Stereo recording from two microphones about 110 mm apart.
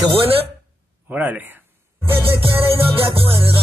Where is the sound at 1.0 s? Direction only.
15° right (ahead or behind).